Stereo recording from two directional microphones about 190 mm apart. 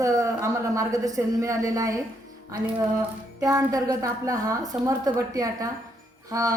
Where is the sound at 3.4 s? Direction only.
15° right (ahead or behind).